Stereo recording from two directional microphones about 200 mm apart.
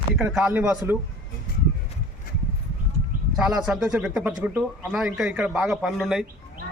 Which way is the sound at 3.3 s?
5° right (ahead or behind).